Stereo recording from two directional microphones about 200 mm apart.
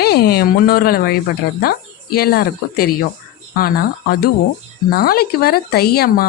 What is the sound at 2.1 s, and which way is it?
Speech, 50° left (ahead or behind).